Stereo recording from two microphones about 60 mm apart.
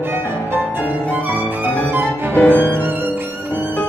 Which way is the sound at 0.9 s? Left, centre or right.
Right.